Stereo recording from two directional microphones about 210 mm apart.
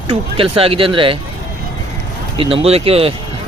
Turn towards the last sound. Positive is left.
turn(degrees=-25)  # may be behind; listen again after turning